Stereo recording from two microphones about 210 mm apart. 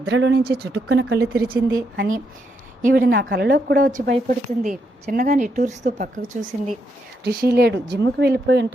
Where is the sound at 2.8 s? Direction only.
45° right (ahead or behind).